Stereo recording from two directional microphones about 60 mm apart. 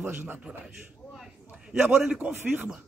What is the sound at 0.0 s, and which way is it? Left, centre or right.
Speech, right.